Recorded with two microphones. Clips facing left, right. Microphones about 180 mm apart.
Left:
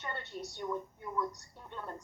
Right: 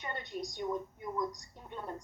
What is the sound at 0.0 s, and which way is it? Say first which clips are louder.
A woman's voice: right 2 dB; 15° right (ahead or behind).